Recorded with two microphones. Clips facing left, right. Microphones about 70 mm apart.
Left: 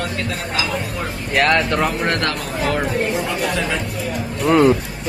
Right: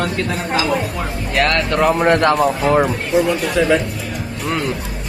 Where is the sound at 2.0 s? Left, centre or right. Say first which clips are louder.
Right 7 dB; centre.